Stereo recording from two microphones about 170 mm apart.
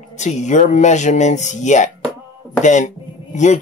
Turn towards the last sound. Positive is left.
turn(degrees=45)  # may be behind; listen again after turning